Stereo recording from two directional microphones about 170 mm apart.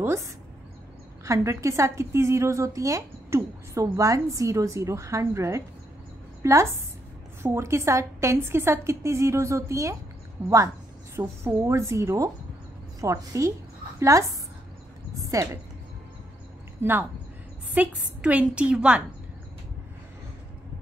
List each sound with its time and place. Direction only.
1.2 s a woman's voice: 15° right (ahead or behind)
15.3 s a woman's voice: 20° right (ahead or behind)
16.8 s a woman's voice: 15° right (ahead or behind)